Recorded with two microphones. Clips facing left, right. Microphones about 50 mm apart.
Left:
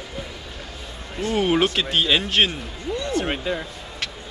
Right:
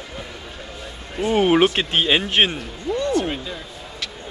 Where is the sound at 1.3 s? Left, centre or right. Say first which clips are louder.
Right 4 dB; right.